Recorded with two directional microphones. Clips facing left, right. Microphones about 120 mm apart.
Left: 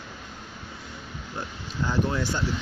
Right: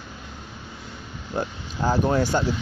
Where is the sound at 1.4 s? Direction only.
60° right (ahead or behind).